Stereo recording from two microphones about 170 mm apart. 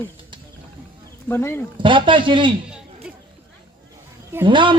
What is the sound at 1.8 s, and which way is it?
Speech, 30° right (ahead or behind).